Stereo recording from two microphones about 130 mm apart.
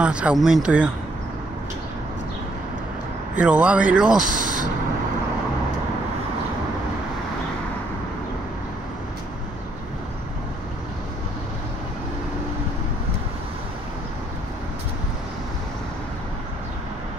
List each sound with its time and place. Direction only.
0.0 s a man's voice: 10° right (ahead or behind)
3.3 s a man's voice: 10° right (ahead or behind)
4.2 s speech: 90° right